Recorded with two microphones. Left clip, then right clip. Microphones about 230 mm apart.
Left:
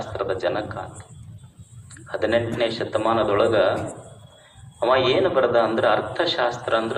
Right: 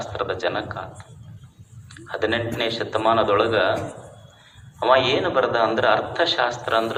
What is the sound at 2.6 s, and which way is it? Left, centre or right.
A man's voice, right.